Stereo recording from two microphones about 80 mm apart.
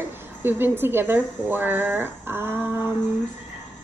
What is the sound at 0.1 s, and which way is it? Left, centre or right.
A woman's voice, right.